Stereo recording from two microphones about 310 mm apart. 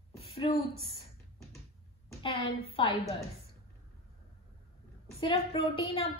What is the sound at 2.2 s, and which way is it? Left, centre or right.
Speech, centre.